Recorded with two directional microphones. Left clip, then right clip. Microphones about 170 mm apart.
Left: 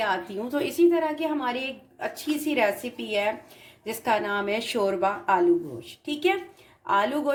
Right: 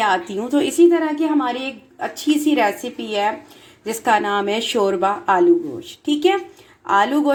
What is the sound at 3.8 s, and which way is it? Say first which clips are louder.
Speech: right 8 dB; 35° right (ahead or behind).